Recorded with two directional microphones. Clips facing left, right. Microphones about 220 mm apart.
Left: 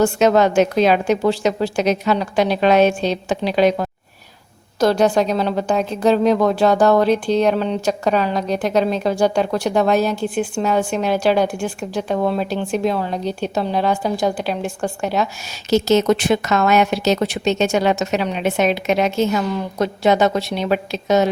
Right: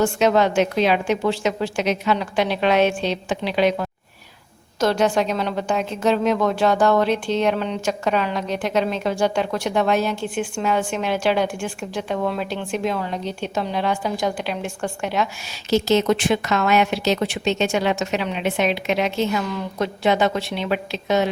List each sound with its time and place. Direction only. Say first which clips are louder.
0.0 s a woman's voice: left 3 dB; 40° left (ahead or behind)